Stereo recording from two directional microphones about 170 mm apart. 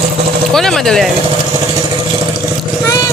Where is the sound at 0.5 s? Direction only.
Centre (ahead or behind).